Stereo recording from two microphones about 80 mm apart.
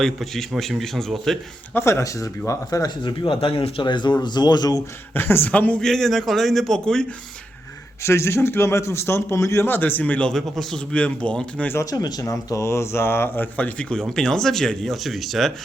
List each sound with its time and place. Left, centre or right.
0.0 s speech: centre
1.7 s a man's voice: left
5.1 s a woman's voice: left
5.8 s speech: centre
8.0 s a man's voice: left
9.6 s a woman's voice: left
10.3 s speech: centre
11.9 s speech: left
12.2 s a man's voice: left; by 13.8 s centre
14.2 s speech: centre